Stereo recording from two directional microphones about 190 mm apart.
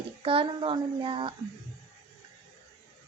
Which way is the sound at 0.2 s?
30° right (ahead or behind).